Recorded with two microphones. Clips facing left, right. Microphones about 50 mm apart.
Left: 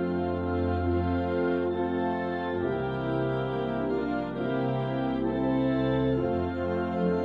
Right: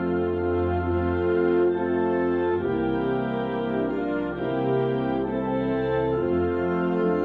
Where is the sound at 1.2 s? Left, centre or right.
Right.